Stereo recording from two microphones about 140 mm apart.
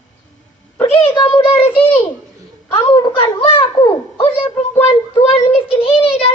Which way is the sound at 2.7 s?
35° left (ahead or behind).